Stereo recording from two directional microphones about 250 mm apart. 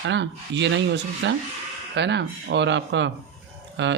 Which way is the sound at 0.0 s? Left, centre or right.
Right.